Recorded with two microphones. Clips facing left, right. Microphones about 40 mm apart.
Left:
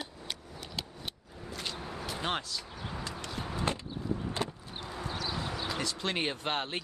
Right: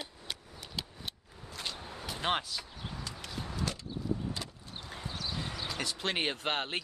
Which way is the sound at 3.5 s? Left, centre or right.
Left.